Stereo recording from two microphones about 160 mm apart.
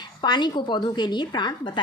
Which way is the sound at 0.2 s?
25° left (ahead or behind).